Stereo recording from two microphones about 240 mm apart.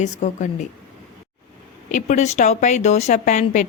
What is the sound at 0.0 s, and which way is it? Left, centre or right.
Speech, left.